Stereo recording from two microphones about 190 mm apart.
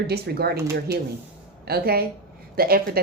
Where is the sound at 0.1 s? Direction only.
55° right (ahead or behind).